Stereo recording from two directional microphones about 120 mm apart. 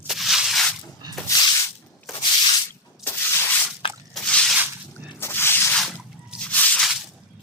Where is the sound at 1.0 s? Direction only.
35° right (ahead or behind).